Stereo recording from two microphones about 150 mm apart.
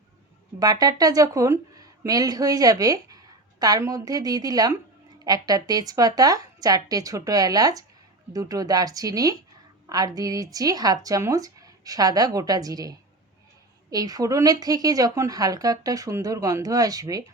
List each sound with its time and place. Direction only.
0.6 s a woman's voice: 25° right (ahead or behind)